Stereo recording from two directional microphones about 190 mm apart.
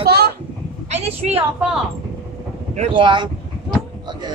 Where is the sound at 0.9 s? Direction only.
35° right (ahead or behind).